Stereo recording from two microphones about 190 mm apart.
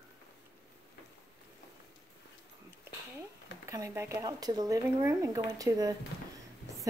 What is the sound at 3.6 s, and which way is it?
Speech, 15° right (ahead or behind).